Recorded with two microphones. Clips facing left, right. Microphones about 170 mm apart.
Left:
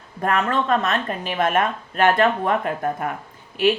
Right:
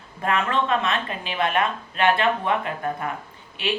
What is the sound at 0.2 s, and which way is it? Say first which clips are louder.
Speech: left 2 dB; 40° left (ahead or behind).